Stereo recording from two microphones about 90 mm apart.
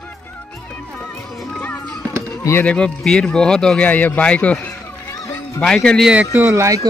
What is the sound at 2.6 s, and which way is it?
Speech, 10° left (ahead or behind).